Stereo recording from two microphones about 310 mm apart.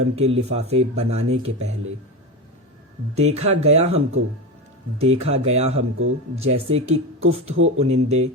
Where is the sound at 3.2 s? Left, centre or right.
Centre.